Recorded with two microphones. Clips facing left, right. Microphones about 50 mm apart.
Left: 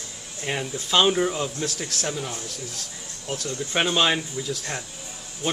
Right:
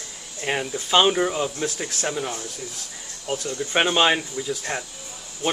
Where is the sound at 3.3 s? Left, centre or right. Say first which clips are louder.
Right 3 dB; centre.